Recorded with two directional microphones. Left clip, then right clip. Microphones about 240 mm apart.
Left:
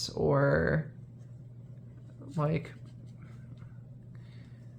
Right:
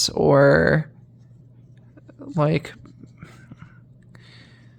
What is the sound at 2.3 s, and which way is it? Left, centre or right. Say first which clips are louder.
Speech: right 11 dB; right.